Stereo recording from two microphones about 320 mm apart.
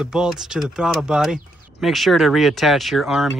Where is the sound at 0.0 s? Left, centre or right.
Centre.